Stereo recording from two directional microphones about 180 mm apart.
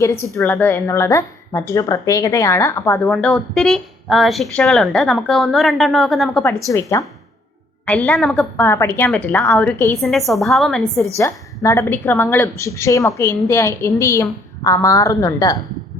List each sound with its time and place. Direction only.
0.0 s a woman's voice: 15° left (ahead or behind)
3.1 s speech: centre (ahead or behind)
6.7 s a woman's voice: 15° left (ahead or behind)
8.6 s a woman's voice: 15° left (ahead or behind)
10.0 s speech: centre (ahead or behind)
11.2 s a woman's voice: 15° left (ahead or behind)